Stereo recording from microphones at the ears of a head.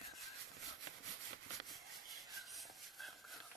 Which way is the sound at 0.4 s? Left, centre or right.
Right.